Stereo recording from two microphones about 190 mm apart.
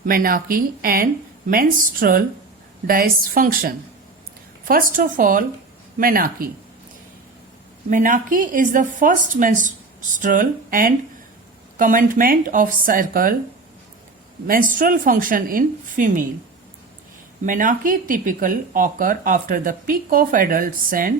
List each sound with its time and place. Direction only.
0.0 s speech: 50° right (ahead or behind)
7.9 s speech: 45° right (ahead or behind)
14.4 s speech: 45° right (ahead or behind)
17.4 s speech: 45° right (ahead or behind)